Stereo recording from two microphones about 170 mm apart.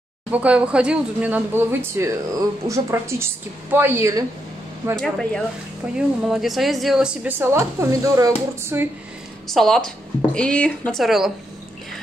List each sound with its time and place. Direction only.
0.3 s speech: 10° right (ahead or behind)
4.9 s speech: 5° left (ahead or behind); by 8.8 s 15° right (ahead or behind)
9.5 s speech: centre (ahead or behind)